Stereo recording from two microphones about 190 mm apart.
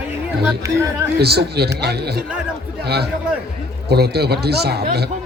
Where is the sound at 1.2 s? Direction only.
60° right (ahead or behind).